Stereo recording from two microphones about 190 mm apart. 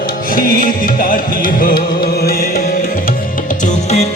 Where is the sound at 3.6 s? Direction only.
40° left (ahead or behind).